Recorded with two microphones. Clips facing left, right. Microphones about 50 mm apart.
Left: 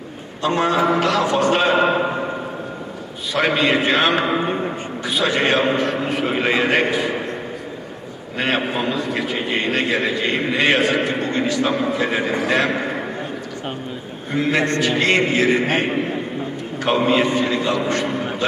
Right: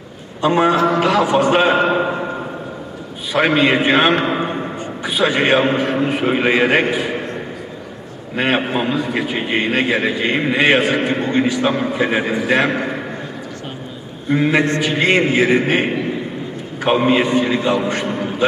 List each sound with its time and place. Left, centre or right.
0.4 s a man's voice: centre
3.3 s a man's voice: centre
8.4 s a man's voice: centre
14.3 s a man's voice: centre